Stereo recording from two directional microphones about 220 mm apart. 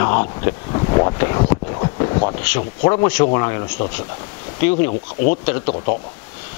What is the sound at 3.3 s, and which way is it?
Speech, 20° left (ahead or behind).